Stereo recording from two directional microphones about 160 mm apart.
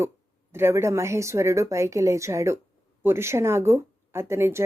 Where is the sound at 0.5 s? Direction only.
15° right (ahead or behind).